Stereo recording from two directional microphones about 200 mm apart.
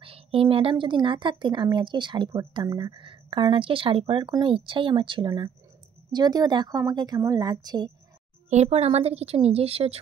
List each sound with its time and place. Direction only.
0.0 s speech: 30° right (ahead or behind)
8.5 s a woman's voice: 30° right (ahead or behind)